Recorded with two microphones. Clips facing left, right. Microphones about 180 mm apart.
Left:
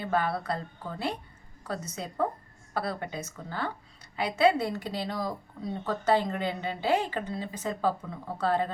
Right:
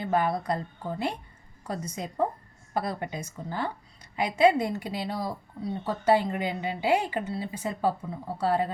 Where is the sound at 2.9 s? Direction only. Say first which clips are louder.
Right 1 dB; 15° right (ahead or behind).